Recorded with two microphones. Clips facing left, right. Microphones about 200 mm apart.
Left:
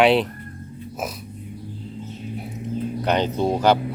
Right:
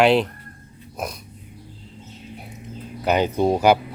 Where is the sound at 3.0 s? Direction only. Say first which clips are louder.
Right 3 dB; 5° right (ahead or behind).